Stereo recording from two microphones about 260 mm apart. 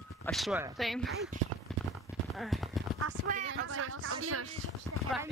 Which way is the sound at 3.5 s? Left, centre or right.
Right.